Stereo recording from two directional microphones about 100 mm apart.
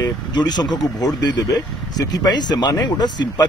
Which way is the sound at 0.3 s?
45° left (ahead or behind).